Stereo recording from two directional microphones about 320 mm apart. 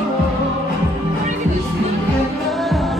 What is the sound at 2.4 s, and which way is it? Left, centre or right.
Music, centre.